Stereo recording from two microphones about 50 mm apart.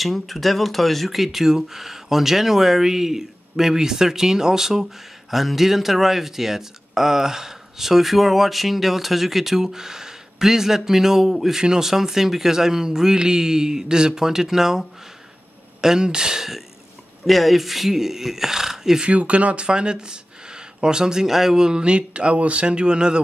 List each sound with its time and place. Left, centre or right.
0.0 s speech: centre
19.0 s speech: right